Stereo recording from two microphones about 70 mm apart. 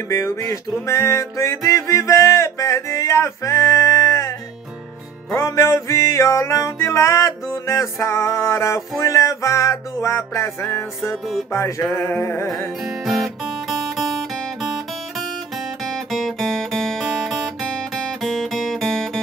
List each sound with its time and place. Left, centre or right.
0.5 s music: left
12.8 s guitar: centre
15.1 s music: centre